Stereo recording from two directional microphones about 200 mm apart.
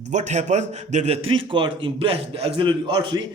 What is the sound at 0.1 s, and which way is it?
A man's voice, 35° right (ahead or behind).